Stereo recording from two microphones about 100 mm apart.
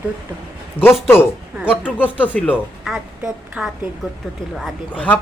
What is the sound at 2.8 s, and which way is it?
Speech, 5° right (ahead or behind).